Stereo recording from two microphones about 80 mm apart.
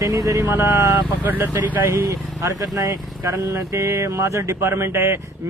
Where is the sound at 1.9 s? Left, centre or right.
Right.